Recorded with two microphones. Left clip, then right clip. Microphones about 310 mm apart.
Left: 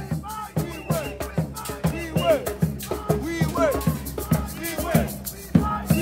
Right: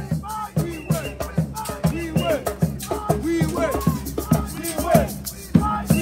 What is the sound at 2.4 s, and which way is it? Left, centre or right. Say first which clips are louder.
Music: right 3 dB; centre.